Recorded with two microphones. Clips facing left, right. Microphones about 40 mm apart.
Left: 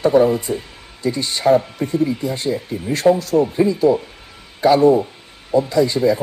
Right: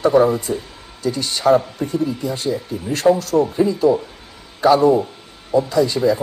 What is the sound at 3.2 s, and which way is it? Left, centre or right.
Speech, right.